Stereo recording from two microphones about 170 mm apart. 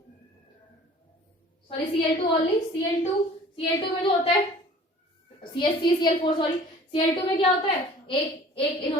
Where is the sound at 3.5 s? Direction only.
30° left (ahead or behind).